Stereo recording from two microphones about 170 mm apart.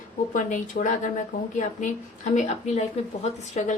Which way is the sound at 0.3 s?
50° left (ahead or behind).